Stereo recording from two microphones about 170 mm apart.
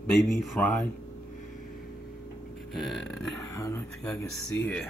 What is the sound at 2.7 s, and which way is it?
Speech, centre (ahead or behind).